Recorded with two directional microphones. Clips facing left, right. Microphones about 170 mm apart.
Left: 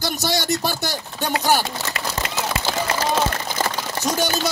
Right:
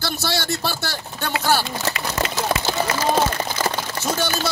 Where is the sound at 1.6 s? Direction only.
45° left (ahead or behind).